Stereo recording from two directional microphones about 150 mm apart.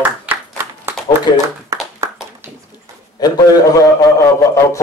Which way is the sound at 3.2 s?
25° left (ahead or behind).